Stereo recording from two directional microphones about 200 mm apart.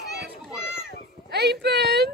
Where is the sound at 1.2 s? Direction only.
55° right (ahead or behind).